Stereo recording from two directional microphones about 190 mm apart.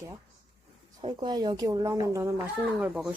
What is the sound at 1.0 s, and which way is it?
Speech, 25° right (ahead or behind).